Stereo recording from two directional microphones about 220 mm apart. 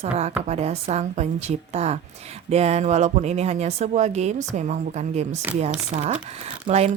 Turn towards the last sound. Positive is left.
turn(degrees=-30)  # may be behind; listen again after turning